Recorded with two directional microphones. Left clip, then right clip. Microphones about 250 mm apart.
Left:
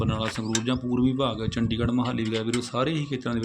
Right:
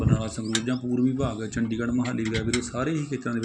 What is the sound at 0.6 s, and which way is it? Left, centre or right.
Speech, centre.